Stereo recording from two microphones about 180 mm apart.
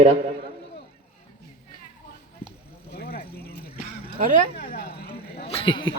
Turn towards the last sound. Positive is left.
turn(degrees=25)  # may be behind; listen again after turning